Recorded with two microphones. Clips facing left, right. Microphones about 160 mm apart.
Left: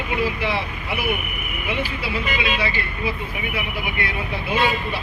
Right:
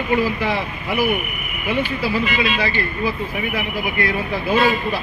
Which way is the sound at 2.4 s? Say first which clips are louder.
Right 3 dB; 40° right (ahead or behind).